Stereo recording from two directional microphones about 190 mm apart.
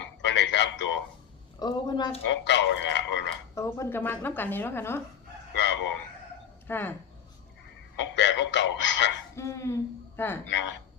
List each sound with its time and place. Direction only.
0.3 s a sound: 70° left (ahead or behind)
1.5 s a woman's voice: 20° left (ahead or behind)
2.2 s a man's voice: 70° left (ahead or behind)
3.5 s speech: 15° left (ahead or behind)
5.5 s speech: 70° left (ahead or behind)
6.7 s speech: 10° left (ahead or behind)
7.9 s a man's voice: 70° left (ahead or behind)
9.3 s speech: 15° left (ahead or behind)